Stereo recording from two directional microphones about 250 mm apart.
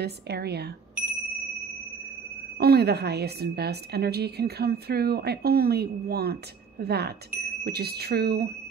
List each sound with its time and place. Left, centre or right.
0.0 s a woman's voice: right
2.6 s a woman's voice: right